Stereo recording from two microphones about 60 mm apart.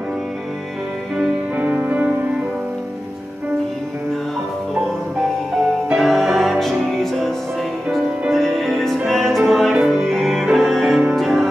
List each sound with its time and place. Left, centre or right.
1.6 s music: right
5.9 s music: centre
8.3 s music: centre